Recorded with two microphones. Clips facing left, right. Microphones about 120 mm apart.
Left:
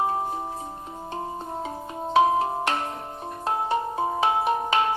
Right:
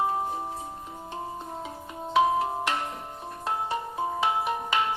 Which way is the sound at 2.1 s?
30° left (ahead or behind).